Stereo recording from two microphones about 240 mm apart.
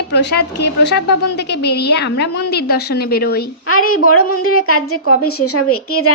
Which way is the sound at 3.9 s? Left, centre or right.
Left.